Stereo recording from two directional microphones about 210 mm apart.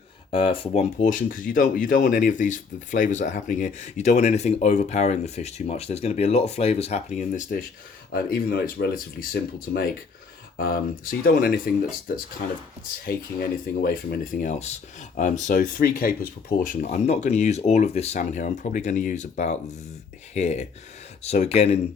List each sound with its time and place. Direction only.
0.3 s speech: 25° left (ahead or behind)
8.1 s speech: 45° left (ahead or behind); by 21.8 s 30° left (ahead or behind)